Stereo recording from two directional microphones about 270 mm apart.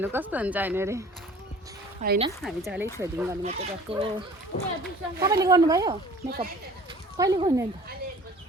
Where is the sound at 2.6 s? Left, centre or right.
Centre.